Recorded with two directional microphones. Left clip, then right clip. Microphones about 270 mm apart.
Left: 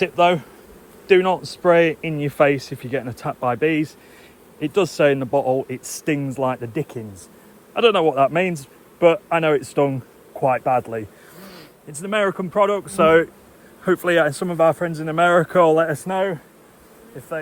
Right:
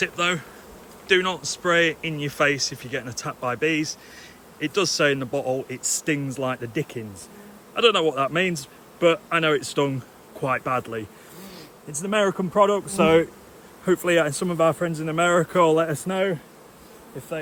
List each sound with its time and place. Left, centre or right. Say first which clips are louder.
0.0 s speech: left 7 dB; centre
1.6 s speech: left 5 dB; centre
13.8 s speech: left 3 dB; centre